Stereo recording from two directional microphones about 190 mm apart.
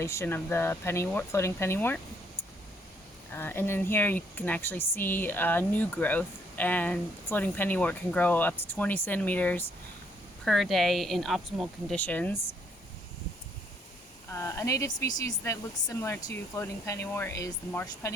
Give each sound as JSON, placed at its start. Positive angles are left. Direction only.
{"t": 0.0, "sound": "speech", "side_deg": 15}
{"t": 3.3, "sound": "speech", "side_deg": 10}
{"t": 14.3, "sound": "speech", "side_deg": 15}